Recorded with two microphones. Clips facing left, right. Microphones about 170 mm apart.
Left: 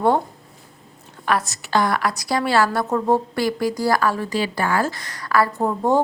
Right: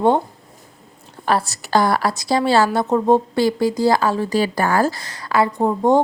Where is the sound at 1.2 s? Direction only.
30° right (ahead or behind).